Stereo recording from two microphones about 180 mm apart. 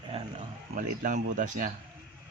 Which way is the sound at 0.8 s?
45° right (ahead or behind).